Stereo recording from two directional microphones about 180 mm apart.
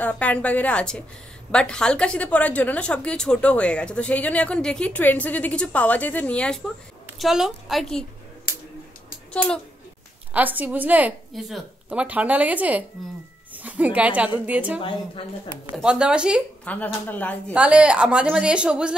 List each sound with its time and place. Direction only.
0.0 s a woman's voice: 10° left (ahead or behind)
9.3 s speech: 5° left (ahead or behind)
10.3 s a woman's voice: 10° right (ahead or behind)
14.8 s a woman's voice: 30° left (ahead or behind)
15.7 s a woman's voice: 5° right (ahead or behind)
16.6 s a woman's voice: 10° left (ahead or behind)
17.6 s a woman's voice: 5° right (ahead or behind)